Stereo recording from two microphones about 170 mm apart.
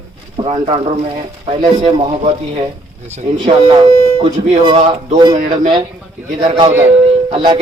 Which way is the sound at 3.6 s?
30° right (ahead or behind).